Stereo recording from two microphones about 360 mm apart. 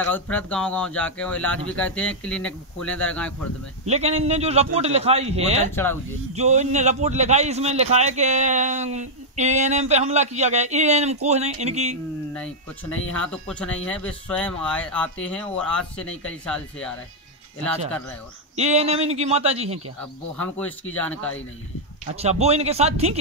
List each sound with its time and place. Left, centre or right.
0.0 s speech: centre
3.8 s a man's voice: centre
13.2 s speech: centre
17.6 s speech: centre
18.6 s a man's voice: centre
20.3 s speech: centre
22.1 s a man's voice: centre